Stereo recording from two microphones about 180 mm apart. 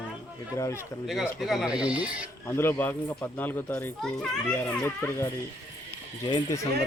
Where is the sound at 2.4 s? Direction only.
15° left (ahead or behind).